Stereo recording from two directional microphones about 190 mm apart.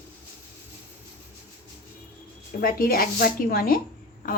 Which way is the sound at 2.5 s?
50° left (ahead or behind).